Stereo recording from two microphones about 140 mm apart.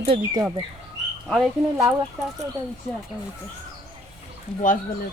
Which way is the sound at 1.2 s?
Centre (ahead or behind).